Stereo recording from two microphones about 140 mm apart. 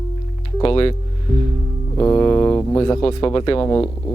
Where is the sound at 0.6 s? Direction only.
40° left (ahead or behind).